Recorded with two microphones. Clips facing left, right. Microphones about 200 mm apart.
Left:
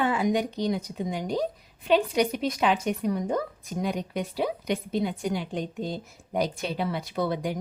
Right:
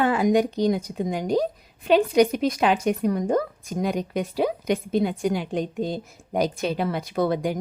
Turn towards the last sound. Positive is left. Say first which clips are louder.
# right 5 dB
turn(degrees=-50)  # may be behind; listen again after turning